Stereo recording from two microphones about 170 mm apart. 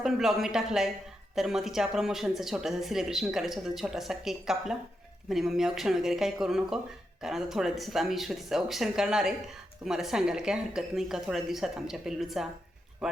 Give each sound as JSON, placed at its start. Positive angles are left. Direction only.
{"t": 0.0, "sound": "speech", "side_deg": 0}